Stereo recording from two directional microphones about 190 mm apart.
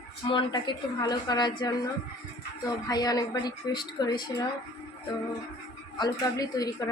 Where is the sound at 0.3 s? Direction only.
25° left (ahead or behind).